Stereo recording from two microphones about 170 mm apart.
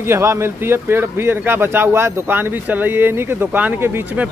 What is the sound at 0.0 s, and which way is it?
Speech, 15° right (ahead or behind).